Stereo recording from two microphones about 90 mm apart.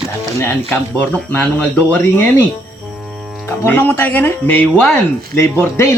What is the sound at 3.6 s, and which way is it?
Speech, 25° left (ahead or behind).